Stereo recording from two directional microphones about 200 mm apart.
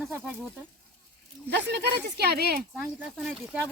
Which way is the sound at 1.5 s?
55° right (ahead or behind).